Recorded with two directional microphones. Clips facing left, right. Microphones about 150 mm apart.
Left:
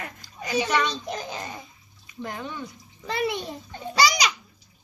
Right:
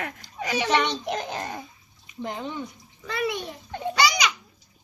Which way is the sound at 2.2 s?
20° right (ahead or behind).